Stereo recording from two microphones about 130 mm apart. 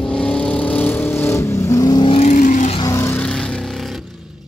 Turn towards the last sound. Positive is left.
turn(degrees=5)  # may be behind; listen again after turning